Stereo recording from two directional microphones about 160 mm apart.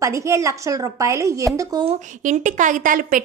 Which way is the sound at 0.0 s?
20° right (ahead or behind).